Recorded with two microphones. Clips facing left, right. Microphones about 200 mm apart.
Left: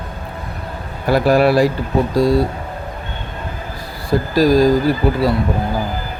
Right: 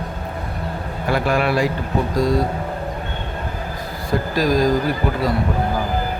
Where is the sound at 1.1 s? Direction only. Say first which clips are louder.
Left 6 dB; 35° left (ahead or behind).